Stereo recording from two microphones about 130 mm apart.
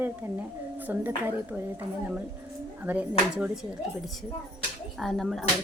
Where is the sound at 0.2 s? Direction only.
10° right (ahead or behind).